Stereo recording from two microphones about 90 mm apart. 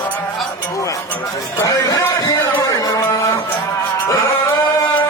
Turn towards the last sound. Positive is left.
turn(degrees=45)  # may be behind; listen again after turning